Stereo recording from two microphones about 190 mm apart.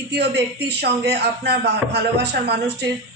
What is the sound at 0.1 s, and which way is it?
A man's voice, 60° right (ahead or behind).